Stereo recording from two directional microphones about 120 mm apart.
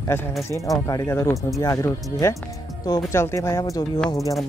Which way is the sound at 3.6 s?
35° left (ahead or behind).